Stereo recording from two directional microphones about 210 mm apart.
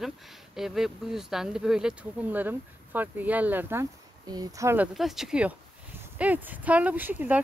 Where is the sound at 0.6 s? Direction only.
Centre (ahead or behind).